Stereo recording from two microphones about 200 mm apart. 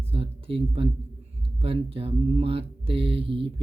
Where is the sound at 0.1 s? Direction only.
30° right (ahead or behind).